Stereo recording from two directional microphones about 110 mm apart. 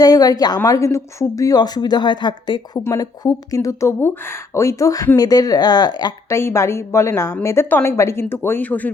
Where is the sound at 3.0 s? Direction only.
35° left (ahead or behind).